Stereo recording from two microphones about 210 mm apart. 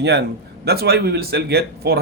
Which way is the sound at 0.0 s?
50° right (ahead or behind).